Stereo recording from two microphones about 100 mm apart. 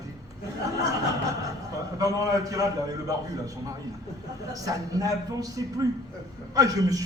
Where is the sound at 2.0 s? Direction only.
35° right (ahead or behind).